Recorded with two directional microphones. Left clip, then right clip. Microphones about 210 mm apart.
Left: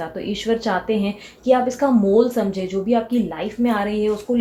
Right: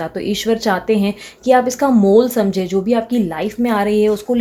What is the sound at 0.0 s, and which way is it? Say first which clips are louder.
A woman's voice: right 5 dB; 55° right (ahead or behind).